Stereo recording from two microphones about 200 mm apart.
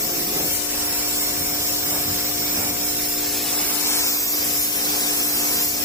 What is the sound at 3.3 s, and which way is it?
Spray, centre (ahead or behind).